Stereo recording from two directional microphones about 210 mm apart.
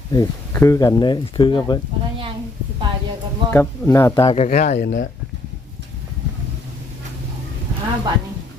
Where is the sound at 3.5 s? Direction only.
10° left (ahead or behind).